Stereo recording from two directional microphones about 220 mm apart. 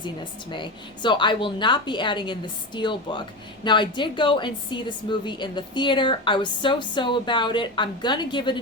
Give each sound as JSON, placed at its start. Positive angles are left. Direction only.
{"t": 0.5, "sound": "a woman's voice", "side_deg": 20}